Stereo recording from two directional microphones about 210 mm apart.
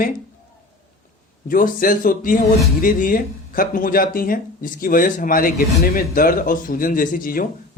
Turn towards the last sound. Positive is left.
turn(degrees=40)  # may be behind; listen again after turning